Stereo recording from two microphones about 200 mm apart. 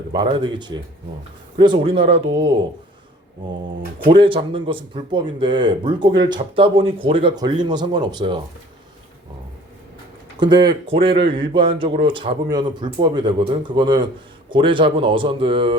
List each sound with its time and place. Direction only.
0.1 s speech: 25° right (ahead or behind)
4.0 s speech: 25° right (ahead or behind)
10.3 s speech: 20° right (ahead or behind)